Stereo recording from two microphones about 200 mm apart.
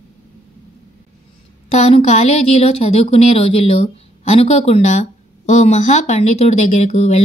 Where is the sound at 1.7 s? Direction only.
35° left (ahead or behind).